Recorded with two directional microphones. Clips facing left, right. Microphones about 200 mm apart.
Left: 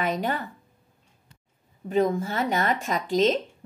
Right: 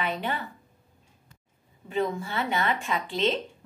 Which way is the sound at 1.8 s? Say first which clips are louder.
Left 5 dB; 40° left (ahead or behind).